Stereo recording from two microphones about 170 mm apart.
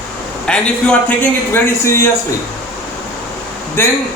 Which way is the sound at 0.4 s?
5° left (ahead or behind).